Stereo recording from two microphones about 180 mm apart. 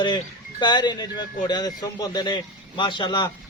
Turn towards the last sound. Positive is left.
turn(degrees=25)  # may be behind; listen again after turning